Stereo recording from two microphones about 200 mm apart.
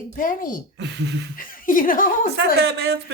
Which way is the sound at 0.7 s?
60° right (ahead or behind).